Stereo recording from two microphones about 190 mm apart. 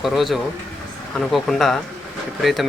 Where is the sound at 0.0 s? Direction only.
Centre (ahead or behind).